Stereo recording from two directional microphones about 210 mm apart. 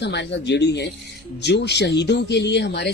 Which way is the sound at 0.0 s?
55° left (ahead or behind).